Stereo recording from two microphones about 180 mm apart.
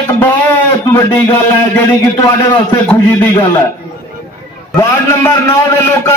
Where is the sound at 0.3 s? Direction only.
15° left (ahead or behind).